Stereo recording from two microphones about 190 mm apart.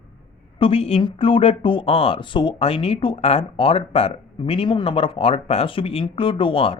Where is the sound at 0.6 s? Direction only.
30° left (ahead or behind).